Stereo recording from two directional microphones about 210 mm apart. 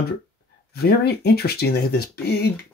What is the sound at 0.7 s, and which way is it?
Speech, 50° left (ahead or behind).